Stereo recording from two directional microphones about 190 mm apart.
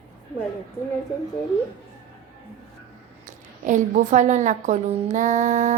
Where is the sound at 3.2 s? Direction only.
40° right (ahead or behind).